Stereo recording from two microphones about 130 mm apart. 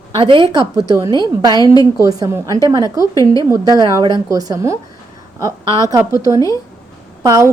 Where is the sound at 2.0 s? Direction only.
25° right (ahead or behind).